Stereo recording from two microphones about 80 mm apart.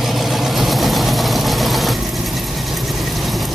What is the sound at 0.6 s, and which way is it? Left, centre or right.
Vehicle, centre.